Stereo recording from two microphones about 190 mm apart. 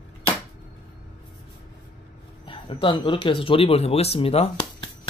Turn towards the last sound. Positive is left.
turn(degrees=30)  # may be behind; listen again after turning